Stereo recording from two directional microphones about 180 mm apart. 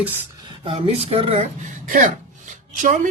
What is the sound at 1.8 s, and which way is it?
Speech, 50° right (ahead or behind).